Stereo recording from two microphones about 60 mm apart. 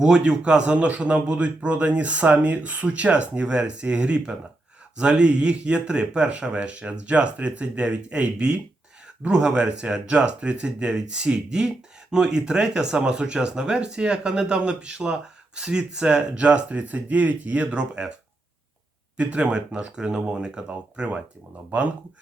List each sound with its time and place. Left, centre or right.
0.0 s a man's voice: centre
19.1 s speech: centre